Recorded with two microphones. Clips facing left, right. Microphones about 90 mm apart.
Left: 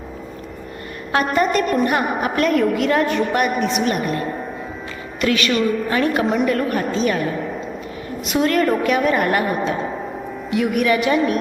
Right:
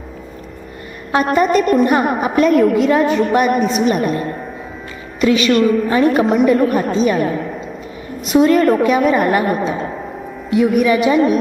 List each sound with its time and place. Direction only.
1.1 s a woman's voice: 10° right (ahead or behind)
1.9 s a woman's voice: 20° right (ahead or behind)
3.1 s a woman's voice: centre (ahead or behind)
3.8 s a woman's voice: 20° right (ahead or behind)
5.5 s a woman's voice: centre (ahead or behind)
5.9 s a woman's voice: 25° right (ahead or behind)
6.2 s a woman's voice: 15° right (ahead or behind)
8.3 s a woman's voice: 15° right (ahead or behind)